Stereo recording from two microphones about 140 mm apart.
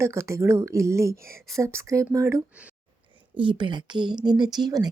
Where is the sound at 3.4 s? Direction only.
35° right (ahead or behind).